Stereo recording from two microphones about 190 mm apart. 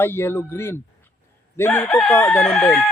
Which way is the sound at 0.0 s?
10° left (ahead or behind).